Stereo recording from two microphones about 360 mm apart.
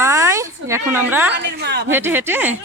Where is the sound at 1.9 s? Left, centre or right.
Centre.